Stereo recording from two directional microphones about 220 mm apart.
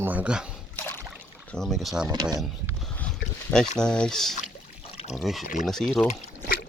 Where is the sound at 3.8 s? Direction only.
5° left (ahead or behind).